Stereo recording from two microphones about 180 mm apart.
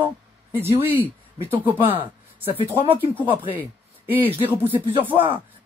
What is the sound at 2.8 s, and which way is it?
Speech, 10° right (ahead or behind).